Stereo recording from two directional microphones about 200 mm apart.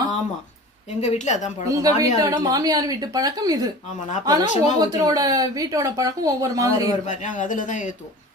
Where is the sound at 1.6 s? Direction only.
15° right (ahead or behind).